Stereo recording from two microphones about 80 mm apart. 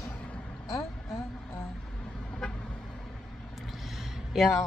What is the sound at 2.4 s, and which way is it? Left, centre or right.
Vehicle, centre.